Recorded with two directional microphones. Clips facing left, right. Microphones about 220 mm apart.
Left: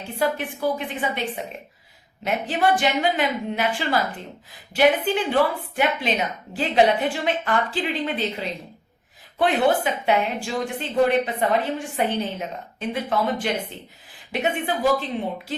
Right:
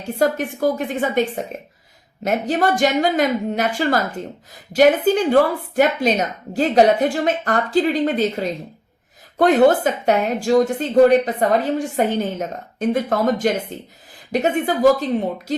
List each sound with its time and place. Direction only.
0.2 s a woman's voice: 45° right (ahead or behind)